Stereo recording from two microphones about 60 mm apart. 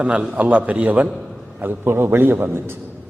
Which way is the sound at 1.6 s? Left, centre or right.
Right.